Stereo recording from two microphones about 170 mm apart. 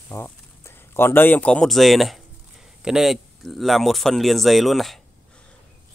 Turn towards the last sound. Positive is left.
turn(degrees=0)  # may be behind; listen again after turning